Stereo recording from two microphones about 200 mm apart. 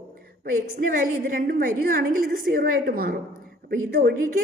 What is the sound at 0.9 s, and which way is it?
A woman's voice, 45° right (ahead or behind).